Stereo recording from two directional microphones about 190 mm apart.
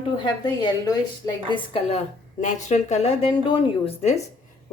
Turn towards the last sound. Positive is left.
turn(degrees=30)  # may be behind; listen again after turning